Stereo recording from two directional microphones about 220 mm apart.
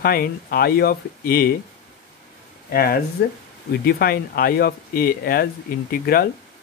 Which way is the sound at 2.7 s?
45° left (ahead or behind).